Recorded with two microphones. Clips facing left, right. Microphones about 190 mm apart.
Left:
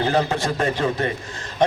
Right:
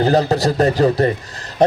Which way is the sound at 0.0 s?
40° right (ahead or behind).